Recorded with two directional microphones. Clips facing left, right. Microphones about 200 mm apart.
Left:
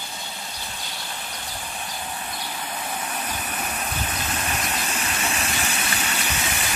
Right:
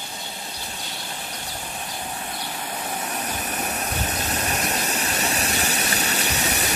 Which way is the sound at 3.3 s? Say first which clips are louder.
Right 2 dB; 40° right (ahead or behind).